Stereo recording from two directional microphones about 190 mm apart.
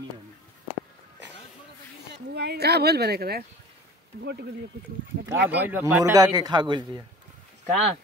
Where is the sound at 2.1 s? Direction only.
60° right (ahead or behind).